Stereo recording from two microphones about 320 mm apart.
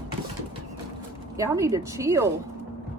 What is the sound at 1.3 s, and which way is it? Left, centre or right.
Speech, centre.